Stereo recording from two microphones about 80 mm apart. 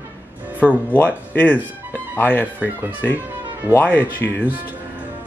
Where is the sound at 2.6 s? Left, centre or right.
Right.